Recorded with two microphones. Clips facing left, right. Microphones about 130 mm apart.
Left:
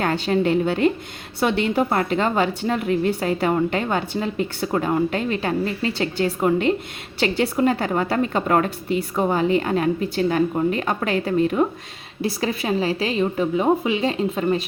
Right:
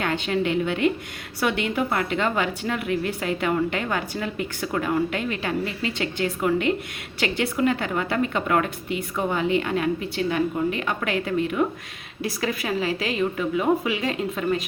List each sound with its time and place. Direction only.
0.0 s a woman's voice: 35° left (ahead or behind)